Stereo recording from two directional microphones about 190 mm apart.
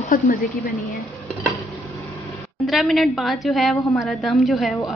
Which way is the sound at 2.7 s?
Centre (ahead or behind).